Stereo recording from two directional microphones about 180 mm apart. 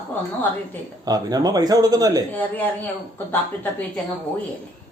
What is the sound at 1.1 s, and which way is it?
Speech, 20° right (ahead or behind).